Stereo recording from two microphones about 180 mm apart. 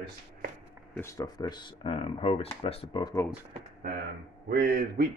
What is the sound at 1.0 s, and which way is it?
Speech, 15° left (ahead or behind).